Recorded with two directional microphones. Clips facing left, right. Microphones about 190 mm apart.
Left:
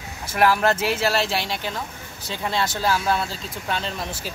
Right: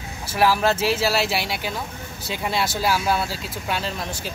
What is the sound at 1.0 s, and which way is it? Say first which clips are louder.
Speech: even; 10° right (ahead or behind).